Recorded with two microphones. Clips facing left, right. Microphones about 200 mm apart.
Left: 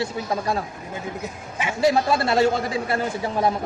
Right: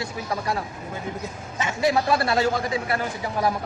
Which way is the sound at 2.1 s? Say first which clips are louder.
Left 2 dB; 25° left (ahead or behind).